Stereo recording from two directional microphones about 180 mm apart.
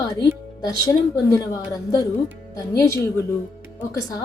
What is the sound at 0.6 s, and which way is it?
A woman's voice, 20° left (ahead or behind).